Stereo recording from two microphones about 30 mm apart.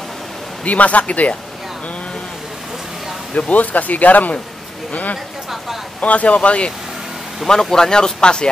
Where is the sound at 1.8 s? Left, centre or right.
Left.